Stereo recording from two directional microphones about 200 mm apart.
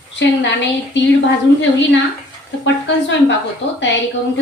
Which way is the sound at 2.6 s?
65° left (ahead or behind).